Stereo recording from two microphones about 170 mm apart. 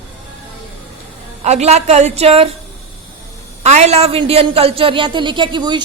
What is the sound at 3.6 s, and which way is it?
A woman's voice, 40° right (ahead or behind).